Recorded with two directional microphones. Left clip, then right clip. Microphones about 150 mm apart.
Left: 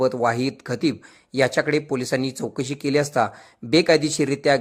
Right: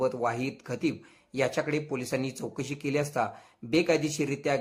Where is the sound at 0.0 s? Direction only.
30° left (ahead or behind).